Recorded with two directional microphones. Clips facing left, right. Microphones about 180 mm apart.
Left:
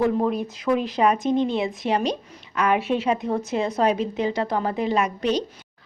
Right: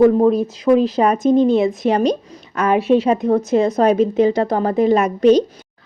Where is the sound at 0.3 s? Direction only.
35° right (ahead or behind).